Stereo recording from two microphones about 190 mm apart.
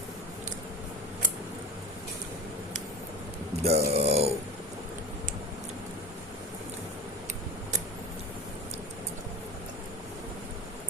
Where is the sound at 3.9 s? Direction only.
30° right (ahead or behind).